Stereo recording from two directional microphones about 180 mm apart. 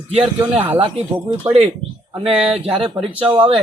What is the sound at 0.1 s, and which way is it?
Speech, 30° right (ahead or behind).